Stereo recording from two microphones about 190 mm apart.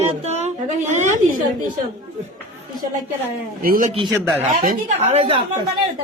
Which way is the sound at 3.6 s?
45° right (ahead or behind).